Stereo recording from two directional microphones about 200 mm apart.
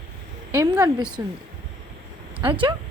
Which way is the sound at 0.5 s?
15° right (ahead or behind).